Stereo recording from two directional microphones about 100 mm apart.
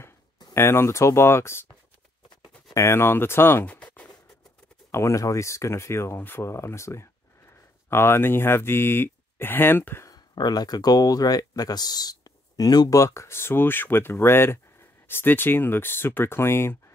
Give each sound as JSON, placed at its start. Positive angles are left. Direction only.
{"t": 0.6, "sound": "speech", "side_deg": 25}
{"t": 2.7, "sound": "speech", "side_deg": 25}
{"t": 4.9, "sound": "speech", "side_deg": 30}
{"t": 10.0, "sound": "speech", "side_deg": 45}